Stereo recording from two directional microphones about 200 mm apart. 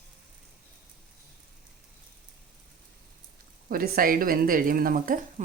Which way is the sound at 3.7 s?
45° right (ahead or behind).